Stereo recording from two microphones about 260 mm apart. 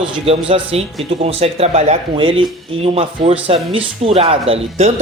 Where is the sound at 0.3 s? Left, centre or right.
Right.